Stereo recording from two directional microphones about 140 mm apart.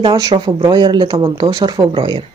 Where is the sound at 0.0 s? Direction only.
30° right (ahead or behind).